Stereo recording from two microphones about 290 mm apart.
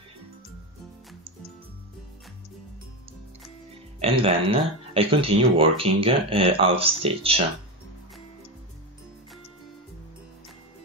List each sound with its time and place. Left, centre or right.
4.0 s speech: centre